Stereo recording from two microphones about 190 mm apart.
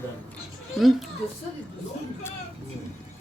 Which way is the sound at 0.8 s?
Centre (ahead or behind).